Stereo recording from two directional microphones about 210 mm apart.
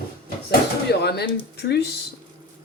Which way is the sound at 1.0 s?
50° left (ahead or behind).